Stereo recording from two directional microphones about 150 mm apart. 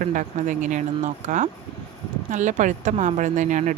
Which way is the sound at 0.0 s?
60° right (ahead or behind).